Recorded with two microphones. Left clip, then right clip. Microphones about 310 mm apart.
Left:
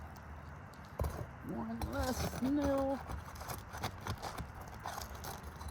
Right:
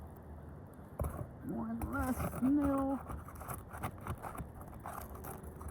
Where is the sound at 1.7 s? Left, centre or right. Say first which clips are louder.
Left 1 dB; centre.